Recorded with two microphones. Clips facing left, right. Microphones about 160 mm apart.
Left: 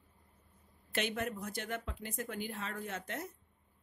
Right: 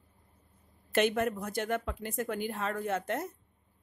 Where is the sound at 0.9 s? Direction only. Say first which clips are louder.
Right 9 dB; 50° right (ahead or behind).